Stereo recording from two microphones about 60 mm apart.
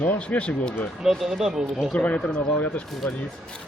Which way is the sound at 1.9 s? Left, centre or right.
Left.